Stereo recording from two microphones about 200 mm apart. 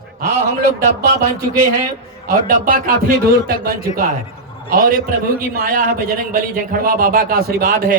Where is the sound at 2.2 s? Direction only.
45° right (ahead or behind).